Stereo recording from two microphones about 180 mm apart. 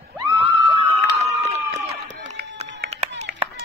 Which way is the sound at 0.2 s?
35° right (ahead or behind).